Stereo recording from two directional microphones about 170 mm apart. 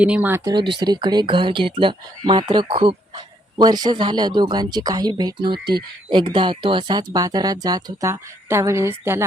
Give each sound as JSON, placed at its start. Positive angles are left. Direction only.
{"t": 0.0, "sound": "speech", "side_deg": -10}
{"t": 0.5, "sound": "speech", "side_deg": -25}